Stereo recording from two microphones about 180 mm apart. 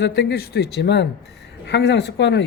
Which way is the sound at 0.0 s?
65° left (ahead or behind).